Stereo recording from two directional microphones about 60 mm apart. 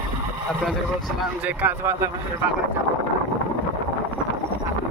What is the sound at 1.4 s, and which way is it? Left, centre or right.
Speech, right.